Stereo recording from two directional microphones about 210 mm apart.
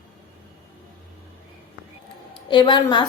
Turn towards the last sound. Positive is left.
turn(degrees=20)  # may be behind; listen again after turning